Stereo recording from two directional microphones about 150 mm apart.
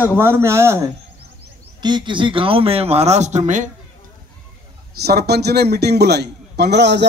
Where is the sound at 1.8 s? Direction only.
30° right (ahead or behind); by 3.7 s 55° right (ahead or behind).